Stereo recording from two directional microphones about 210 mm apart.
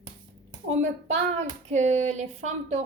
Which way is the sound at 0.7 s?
35° right (ahead or behind).